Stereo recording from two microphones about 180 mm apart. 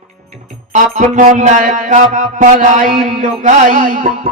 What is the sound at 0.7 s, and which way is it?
Music, 45° right (ahead or behind).